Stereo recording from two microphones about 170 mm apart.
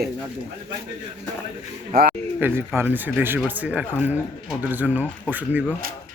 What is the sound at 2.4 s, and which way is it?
Speech, 15° right (ahead or behind).